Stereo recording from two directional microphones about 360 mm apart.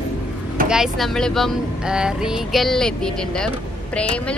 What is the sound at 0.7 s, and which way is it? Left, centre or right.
Speech, centre.